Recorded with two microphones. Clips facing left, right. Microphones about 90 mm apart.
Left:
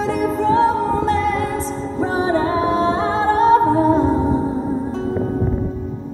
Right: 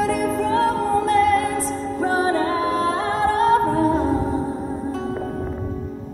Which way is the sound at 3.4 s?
Centre (ahead or behind).